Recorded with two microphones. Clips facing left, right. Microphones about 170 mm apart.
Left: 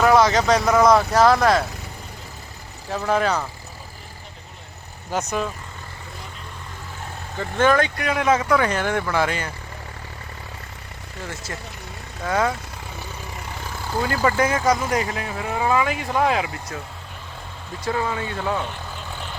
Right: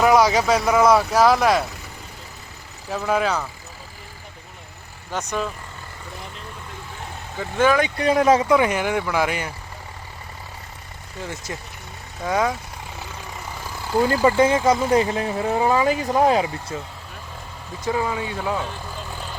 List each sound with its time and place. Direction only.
0.0 s speech: 10° right (ahead or behind)
2.9 s speech: 5° right (ahead or behind)
5.1 s speech: 5° left (ahead or behind)
7.3 s speech: 5° right (ahead or behind)
7.9 s speech: 30° right (ahead or behind)
8.4 s speech: 20° right (ahead or behind)
12.2 s speech: 15° right (ahead or behind)
14.1 s speech: 20° right (ahead or behind)
17.8 s speech: 10° right (ahead or behind)